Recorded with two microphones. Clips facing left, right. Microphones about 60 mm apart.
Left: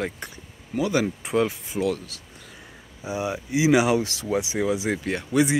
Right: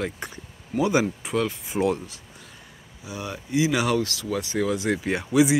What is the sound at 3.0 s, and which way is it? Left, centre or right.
Speech, centre.